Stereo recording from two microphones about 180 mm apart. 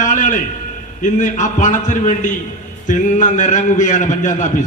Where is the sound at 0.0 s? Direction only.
45° left (ahead or behind).